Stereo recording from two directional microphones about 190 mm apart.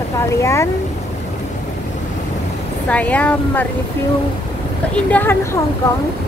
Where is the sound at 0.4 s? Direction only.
15° left (ahead or behind).